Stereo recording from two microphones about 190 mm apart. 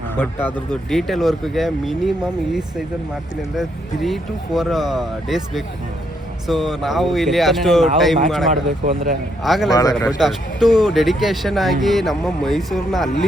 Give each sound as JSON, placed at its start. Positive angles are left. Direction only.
{"t": 0.2, "sound": "speech", "side_deg": 10}
{"t": 8.4, "sound": "speech", "side_deg": -40}
{"t": 9.4, "sound": "speech", "side_deg": 0}